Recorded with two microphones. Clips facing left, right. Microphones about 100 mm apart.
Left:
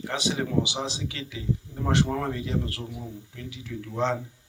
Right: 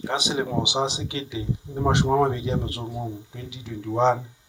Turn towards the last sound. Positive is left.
turn(degrees=-20)  # may be behind; listen again after turning